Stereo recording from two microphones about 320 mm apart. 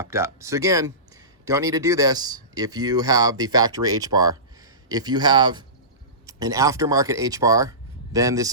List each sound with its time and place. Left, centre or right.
0.0 s a man's voice: centre